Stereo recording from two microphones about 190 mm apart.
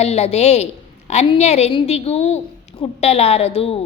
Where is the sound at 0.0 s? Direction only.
35° left (ahead or behind).